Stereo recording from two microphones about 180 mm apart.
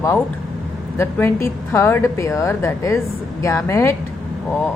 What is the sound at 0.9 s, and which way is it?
Speech, 15° left (ahead or behind).